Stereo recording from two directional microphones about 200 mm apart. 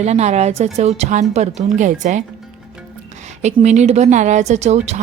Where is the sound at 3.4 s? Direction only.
35° right (ahead or behind).